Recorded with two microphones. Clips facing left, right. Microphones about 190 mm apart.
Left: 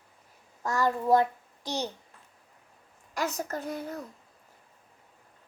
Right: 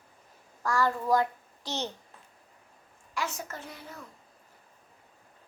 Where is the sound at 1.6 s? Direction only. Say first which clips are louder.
Left 2 dB; 10° left (ahead or behind).